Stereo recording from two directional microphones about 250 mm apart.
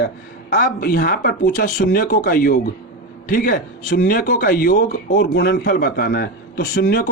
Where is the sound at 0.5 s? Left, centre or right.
Left.